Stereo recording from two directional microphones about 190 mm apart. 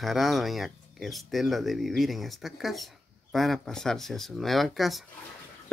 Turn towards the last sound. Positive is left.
turn(degrees=0)  # may be behind; listen again after turning